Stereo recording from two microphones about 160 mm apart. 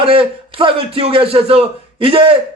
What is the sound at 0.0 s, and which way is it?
A man's voice, 35° right (ahead or behind).